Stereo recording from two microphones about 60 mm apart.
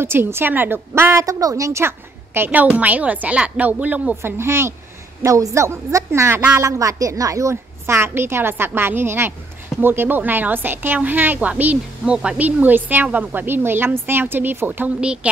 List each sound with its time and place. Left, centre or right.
0.0 s speech: right
1.2 s a woman's voice: right
1.8 s a woman's voice: right
4.2 s speech: right
5.2 s a woman's voice: right
6.5 s a woman's voice: right
7.8 s a woman's voice: right
12.0 s speech: centre
12.4 s speech: right